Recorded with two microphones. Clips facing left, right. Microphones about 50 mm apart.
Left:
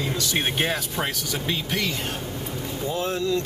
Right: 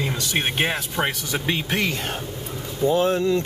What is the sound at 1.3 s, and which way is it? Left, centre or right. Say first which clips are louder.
Speech: right 3 dB; right.